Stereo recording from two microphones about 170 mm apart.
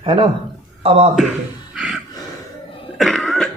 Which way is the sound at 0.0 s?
30° right (ahead or behind).